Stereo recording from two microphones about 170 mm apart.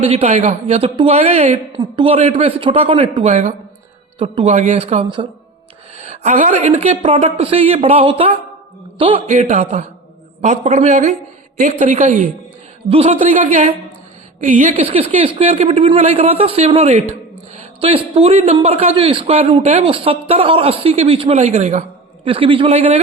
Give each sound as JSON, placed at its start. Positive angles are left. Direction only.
{"t": 0.1, "sound": "a man's voice", "side_deg": -40}
{"t": 3.2, "sound": "a man's voice", "side_deg": -45}
{"t": 4.9, "sound": "a man's voice", "side_deg": -30}
{"t": 6.0, "sound": "a man's voice", "side_deg": -45}
{"t": 9.3, "sound": "a man's voice", "side_deg": -45}
{"t": 12.9, "sound": "a man's voice", "side_deg": -35}
{"t": 14.8, "sound": "a man's voice", "side_deg": -35}
{"t": 22.2, "sound": "a man's voice", "side_deg": -30}